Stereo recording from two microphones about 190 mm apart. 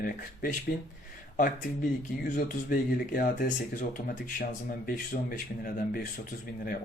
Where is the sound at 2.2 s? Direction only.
45° left (ahead or behind).